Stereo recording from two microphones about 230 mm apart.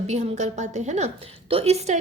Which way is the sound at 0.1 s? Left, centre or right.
Right.